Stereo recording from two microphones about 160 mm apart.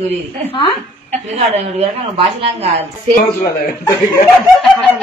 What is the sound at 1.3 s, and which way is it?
A woman's voice, 40° right (ahead or behind).